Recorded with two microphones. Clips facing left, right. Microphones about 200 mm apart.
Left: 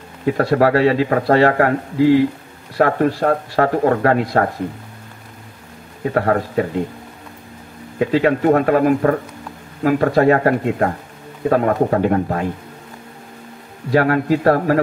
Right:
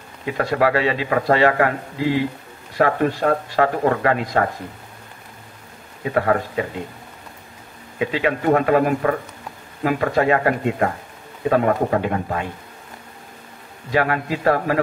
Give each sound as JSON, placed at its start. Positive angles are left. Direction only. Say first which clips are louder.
{"t": 0.2, "sound": "speech", "louder": "left 5 dB", "side_deg": 40}
{"t": 2.8, "sound": "speech", "louder": "left 2 dB", "side_deg": 40}
{"t": 6.0, "sound": "speech", "louder": "left 2 dB", "side_deg": 40}
{"t": 8.0, "sound": "speech", "louder": "left 5 dB", "side_deg": 45}
{"t": 13.8, "sound": "speech", "louder": "left 5 dB", "side_deg": 45}